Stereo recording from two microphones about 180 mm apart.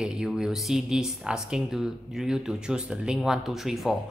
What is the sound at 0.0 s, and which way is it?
Speech, 5° right (ahead or behind).